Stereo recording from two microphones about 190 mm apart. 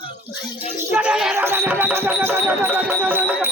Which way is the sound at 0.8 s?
10° right (ahead or behind).